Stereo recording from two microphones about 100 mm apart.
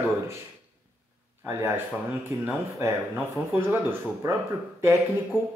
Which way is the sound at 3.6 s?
25° right (ahead or behind).